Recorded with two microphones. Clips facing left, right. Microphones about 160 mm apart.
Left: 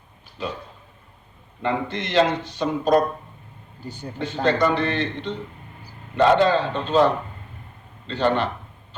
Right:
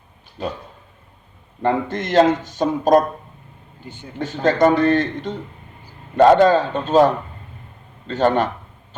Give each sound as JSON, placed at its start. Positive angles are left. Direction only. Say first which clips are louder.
{"t": 1.6, "sound": "speech", "louder": "right 5 dB", "side_deg": -45}
{"t": 3.8, "sound": "speech", "louder": "left 2 dB", "side_deg": 40}
{"t": 4.2, "sound": "speech", "louder": "right 4 dB", "side_deg": -45}